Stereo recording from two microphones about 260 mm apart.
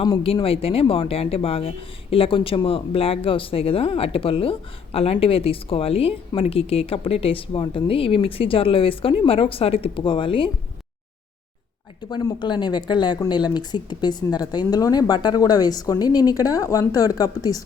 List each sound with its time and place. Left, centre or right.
0.0 s speech: centre
12.0 s speech: centre